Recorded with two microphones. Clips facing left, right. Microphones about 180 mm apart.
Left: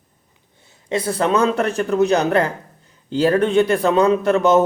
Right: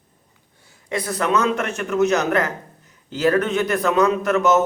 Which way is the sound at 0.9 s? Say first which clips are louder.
Left 3 dB; 25° left (ahead or behind).